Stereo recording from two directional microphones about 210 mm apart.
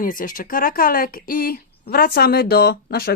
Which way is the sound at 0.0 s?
40° left (ahead or behind).